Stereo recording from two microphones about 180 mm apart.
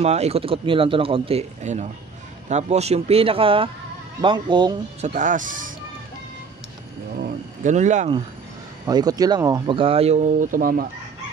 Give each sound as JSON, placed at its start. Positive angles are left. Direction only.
{"t": 0.0, "sound": "speech", "side_deg": -35}
{"t": 5.0, "sound": "speech", "side_deg": -45}
{"t": 7.2, "sound": "speech", "side_deg": -50}
{"t": 8.8, "sound": "speech", "side_deg": -20}